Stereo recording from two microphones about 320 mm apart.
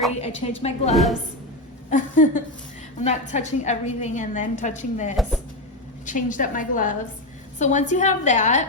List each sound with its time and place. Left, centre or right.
0.2 s a woman's voice: centre
5.1 s speech: centre
6.1 s a woman's voice: left